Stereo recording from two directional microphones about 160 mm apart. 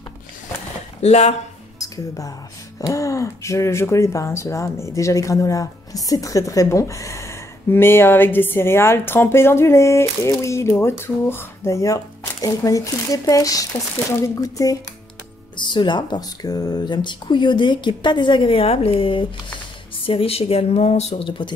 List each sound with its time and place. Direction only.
1.0 s speech: 40° left (ahead or behind)
1.8 s speech: 20° left (ahead or behind)